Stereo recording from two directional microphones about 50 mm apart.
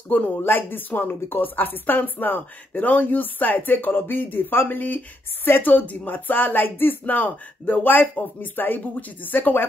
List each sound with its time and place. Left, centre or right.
0.4 s speech: left